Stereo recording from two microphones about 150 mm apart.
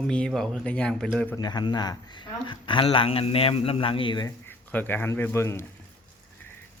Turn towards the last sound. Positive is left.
turn(degrees=15)  # may be behind; listen again after turning